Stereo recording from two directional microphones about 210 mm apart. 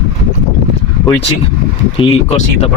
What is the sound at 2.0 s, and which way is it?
Speech, 30° left (ahead or behind).